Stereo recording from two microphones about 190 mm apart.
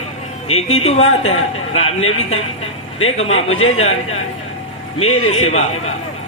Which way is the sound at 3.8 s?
35° left (ahead or behind).